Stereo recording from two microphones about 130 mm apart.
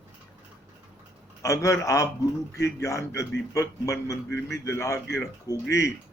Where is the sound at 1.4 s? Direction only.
25° left (ahead or behind).